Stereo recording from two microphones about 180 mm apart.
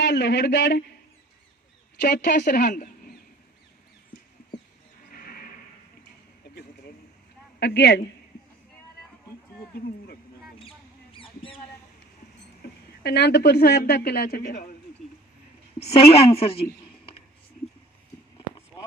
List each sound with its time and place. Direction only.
0.0 s a man's voice: 70° left (ahead or behind)
2.0 s speech: 60° left (ahead or behind)
5.1 s music: 55° left (ahead or behind)
7.6 s speech: 65° left (ahead or behind)
10.6 s a sound: 30° left (ahead or behind)
13.0 s speech: 70° left (ahead or behind); by 14.7 s 45° left (ahead or behind)
15.8 s a woman's voice: 35° left (ahead or behind)